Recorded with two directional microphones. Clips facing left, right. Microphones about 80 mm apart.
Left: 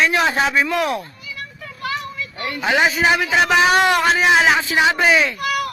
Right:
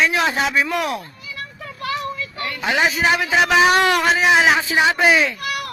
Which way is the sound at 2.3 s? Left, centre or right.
Left.